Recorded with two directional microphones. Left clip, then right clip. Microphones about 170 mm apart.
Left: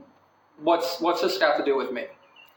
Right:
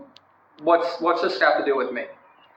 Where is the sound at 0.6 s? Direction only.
25° left (ahead or behind).